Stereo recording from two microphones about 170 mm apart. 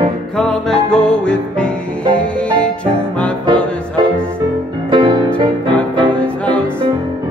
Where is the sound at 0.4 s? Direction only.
5° left (ahead or behind).